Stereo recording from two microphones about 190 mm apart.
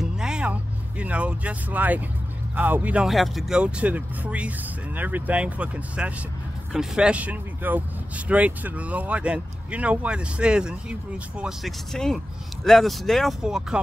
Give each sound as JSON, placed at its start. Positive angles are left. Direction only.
{"t": 0.0, "sound": "vehicle", "side_deg": -5}
{"t": 2.5, "sound": "speech", "side_deg": -10}